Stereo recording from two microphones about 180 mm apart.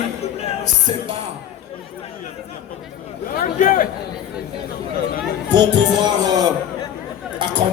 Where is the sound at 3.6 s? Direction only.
50° left (ahead or behind).